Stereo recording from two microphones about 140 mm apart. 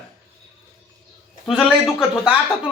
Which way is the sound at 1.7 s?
5° right (ahead or behind).